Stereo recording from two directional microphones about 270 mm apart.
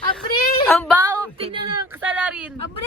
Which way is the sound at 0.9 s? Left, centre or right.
Centre.